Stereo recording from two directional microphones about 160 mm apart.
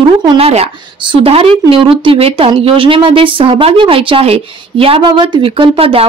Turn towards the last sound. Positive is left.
turn(degrees=-35)  # may be behind; listen again after turning